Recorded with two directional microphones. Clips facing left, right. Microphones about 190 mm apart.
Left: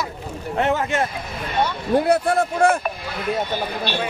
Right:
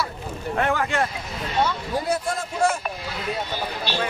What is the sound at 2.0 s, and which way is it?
Speech, 65° left (ahead or behind).